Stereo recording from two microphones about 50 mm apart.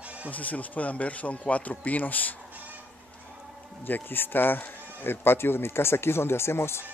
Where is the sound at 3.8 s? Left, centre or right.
Left.